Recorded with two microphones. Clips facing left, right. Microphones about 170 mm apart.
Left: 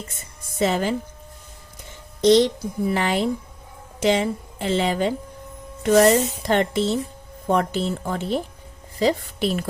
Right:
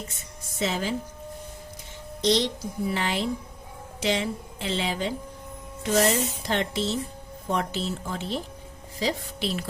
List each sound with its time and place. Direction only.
0.6 s speech: 55° left (ahead or behind)
2.2 s a woman's voice: 50° left (ahead or behind)